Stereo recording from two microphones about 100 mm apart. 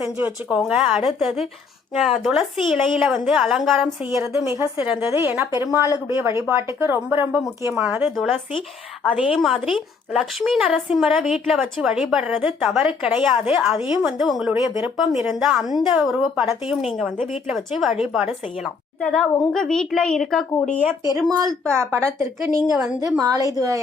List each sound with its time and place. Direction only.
0.0 s a woman's voice: 15° right (ahead or behind)
4.1 s a woman's voice: 30° right (ahead or behind)
8.1 s a woman's voice: centre (ahead or behind)
21.1 s a woman's voice: 40° right (ahead or behind)
21.7 s speech: 25° right (ahead or behind)
22.7 s speech: 5° right (ahead or behind)
23.0 s a woman's voice: 35° right (ahead or behind)